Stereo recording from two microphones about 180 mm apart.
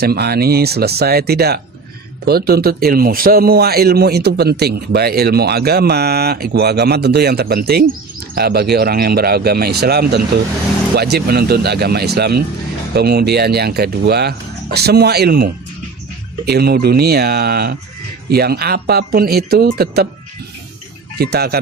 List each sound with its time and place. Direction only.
0.0 s speech: 60° right (ahead or behind)
16.5 s speech: 60° right (ahead or behind)
21.2 s speech: 60° right (ahead or behind)